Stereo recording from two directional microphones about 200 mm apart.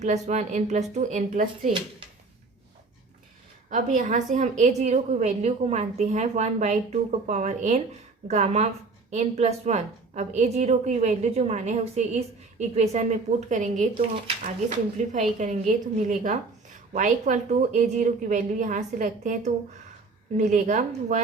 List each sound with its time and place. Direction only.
0.0 s a woman's voice: 35° right (ahead or behind)
3.7 s a woman's voice: 40° right (ahead or behind)
15.1 s a woman's voice: 35° right (ahead or behind)